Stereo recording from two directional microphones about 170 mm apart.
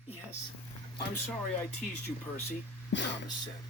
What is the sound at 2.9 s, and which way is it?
Speech, 90° left.